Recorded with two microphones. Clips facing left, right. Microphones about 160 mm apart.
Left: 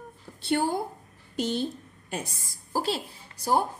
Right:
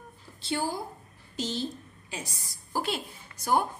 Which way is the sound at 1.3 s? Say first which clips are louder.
Left 4 dB; 55° left (ahead or behind).